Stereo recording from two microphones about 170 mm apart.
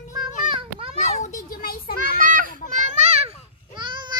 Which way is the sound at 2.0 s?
55° right (ahead or behind).